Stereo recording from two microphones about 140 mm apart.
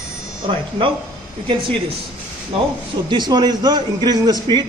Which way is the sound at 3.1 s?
30° right (ahead or behind).